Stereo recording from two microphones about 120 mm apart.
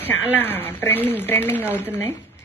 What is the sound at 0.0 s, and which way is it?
Speech, 15° left (ahead or behind).